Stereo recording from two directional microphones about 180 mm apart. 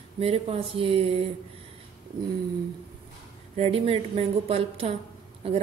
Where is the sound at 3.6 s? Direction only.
35° right (ahead or behind).